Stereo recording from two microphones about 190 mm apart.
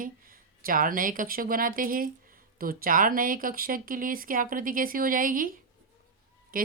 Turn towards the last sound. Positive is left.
turn(degrees=-50)  # may be behind; listen again after turning